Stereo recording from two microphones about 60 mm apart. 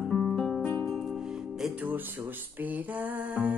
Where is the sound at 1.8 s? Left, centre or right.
Right.